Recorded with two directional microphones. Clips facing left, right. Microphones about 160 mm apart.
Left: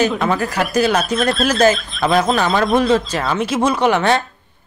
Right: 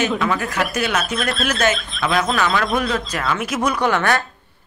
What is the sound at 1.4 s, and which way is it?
Speech, 35° left (ahead or behind).